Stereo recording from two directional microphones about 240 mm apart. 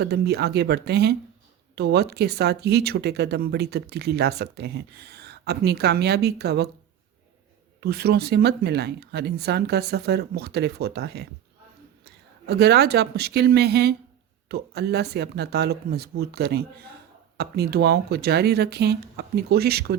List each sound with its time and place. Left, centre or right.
0.0 s speech: right
7.8 s speech: right